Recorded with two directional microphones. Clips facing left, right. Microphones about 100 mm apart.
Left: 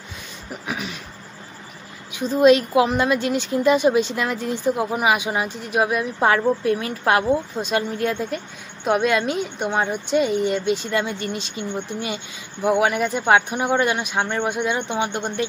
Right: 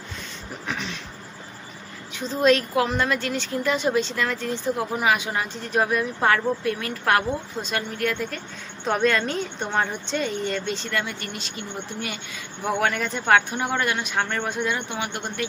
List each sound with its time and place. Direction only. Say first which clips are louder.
0.7 s speech: left 2 dB; 10° left (ahead or behind)
2.1 s speech: left 5 dB; 15° left (ahead or behind)
8.8 s a man's voice: left 3 dB; 10° left (ahead or behind)